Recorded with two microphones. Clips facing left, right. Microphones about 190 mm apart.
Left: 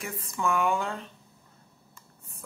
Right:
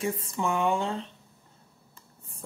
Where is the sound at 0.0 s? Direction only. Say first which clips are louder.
Right 2 dB; 30° right (ahead or behind).